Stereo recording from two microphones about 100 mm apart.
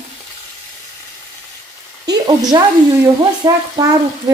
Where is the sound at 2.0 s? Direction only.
40° right (ahead or behind).